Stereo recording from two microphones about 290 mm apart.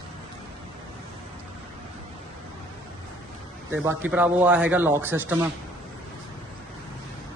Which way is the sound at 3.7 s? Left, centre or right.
Centre.